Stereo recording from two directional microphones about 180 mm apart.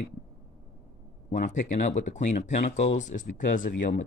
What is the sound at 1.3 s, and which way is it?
Speech, 45° left (ahead or behind).